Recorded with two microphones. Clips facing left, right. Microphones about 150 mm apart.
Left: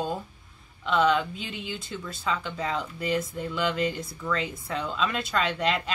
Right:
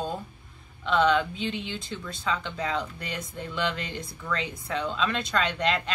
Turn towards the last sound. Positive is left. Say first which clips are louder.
# even
turn(degrees=5)  # may be behind; listen again after turning